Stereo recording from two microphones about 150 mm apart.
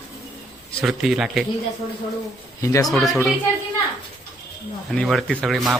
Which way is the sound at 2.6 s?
20° left (ahead or behind).